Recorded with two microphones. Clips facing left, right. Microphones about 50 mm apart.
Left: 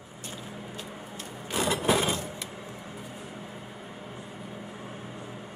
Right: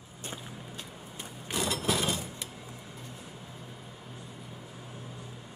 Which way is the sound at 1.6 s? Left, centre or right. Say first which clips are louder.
Left 5 dB; centre.